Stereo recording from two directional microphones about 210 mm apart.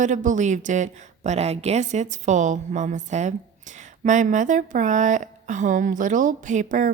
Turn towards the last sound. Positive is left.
turn(degrees=-40)  # may be behind; listen again after turning